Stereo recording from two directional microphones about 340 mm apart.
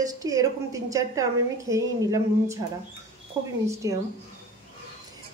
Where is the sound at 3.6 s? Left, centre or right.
Centre.